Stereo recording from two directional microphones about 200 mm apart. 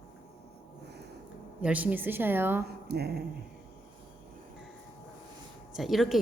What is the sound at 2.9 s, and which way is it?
Music, 55° right (ahead or behind).